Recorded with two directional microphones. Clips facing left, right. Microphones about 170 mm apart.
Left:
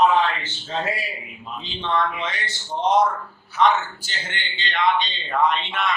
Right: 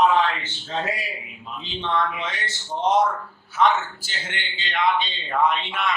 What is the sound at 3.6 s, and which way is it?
Speech, 5° right (ahead or behind).